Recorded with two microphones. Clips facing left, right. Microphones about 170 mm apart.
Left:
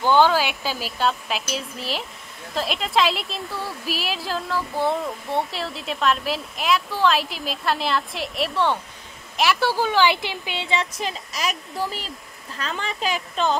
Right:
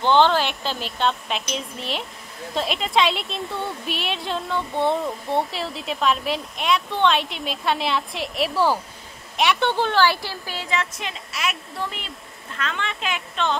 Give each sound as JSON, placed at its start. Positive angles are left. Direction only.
{"t": 0.0, "sound": "speech", "side_deg": 5}
{"t": 10.0, "sound": "speech", "side_deg": 20}